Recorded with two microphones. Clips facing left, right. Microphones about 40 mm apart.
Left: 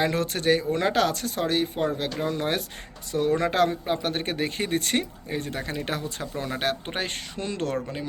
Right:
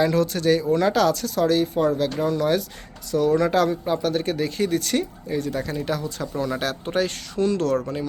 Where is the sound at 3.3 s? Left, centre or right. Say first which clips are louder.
Right 2 dB; left.